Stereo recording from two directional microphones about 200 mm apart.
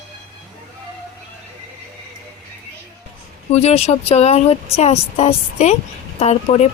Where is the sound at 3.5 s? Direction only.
30° left (ahead or behind).